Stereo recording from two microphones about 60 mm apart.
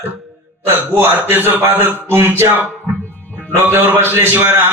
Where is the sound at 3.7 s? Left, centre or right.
Right.